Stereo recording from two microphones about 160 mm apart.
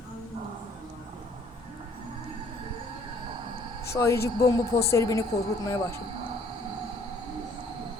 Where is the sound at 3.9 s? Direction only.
15° left (ahead or behind).